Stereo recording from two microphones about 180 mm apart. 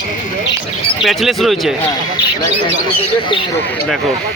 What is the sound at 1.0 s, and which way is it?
Speech, centre (ahead or behind).